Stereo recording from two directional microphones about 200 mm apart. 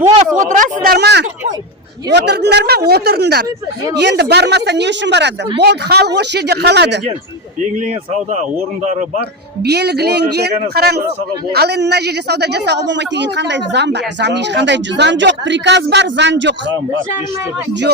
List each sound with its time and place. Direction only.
0.3 s speech: 40° right (ahead or behind)
0.9 s a woman's voice: 55° right (ahead or behind)
8.8 s speech: 35° right (ahead or behind)
9.6 s a man's voice: 55° right (ahead or behind)